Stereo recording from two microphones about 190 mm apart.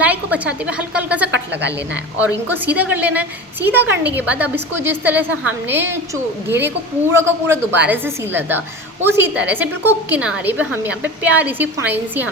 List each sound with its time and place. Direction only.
0.0 s a woman's voice: 10° right (ahead or behind)
1.3 s a woman's voice: 70° right (ahead or behind)
2.1 s a woman's voice: 10° right (ahead or behind)